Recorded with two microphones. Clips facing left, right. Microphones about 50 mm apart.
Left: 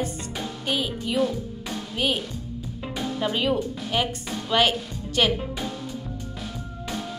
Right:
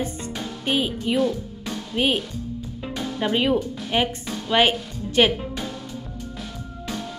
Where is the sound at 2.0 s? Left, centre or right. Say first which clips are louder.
Right 4 dB; centre.